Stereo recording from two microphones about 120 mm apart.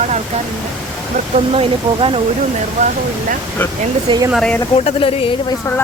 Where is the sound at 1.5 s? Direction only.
50° right (ahead or behind).